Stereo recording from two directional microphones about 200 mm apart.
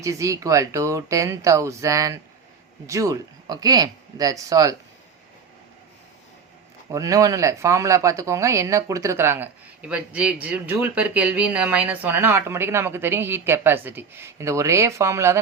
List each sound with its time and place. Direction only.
0.0 s speech: 15° right (ahead or behind)
6.9 s speech: 15° right (ahead or behind)